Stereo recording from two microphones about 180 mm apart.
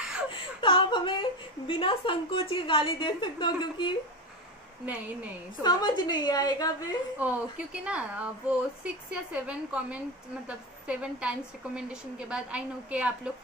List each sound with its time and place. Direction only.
0.3 s whimper: 30° left (ahead or behind)
1.7 s a woman's voice: 30° left (ahead or behind)
4.8 s a woman's voice: 10° right (ahead or behind)
5.6 s a woman's voice: 25° left (ahead or behind)
7.2 s a woman's voice: 10° right (ahead or behind)